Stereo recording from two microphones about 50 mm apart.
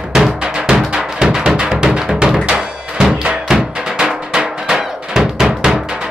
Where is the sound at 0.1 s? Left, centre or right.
Centre.